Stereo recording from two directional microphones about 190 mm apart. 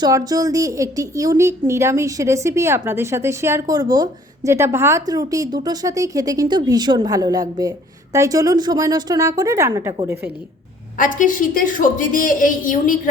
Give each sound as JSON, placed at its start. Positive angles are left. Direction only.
{"t": 0.0, "sound": "a woman's voice", "side_deg": -20}
{"t": 10.9, "sound": "a woman's voice", "side_deg": 45}